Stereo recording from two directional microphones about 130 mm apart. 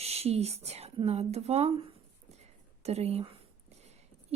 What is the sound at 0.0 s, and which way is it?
Speech, 50° right (ahead or behind).